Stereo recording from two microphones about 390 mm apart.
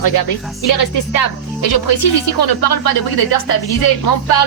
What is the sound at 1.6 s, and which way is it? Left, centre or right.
A woman's voice, left.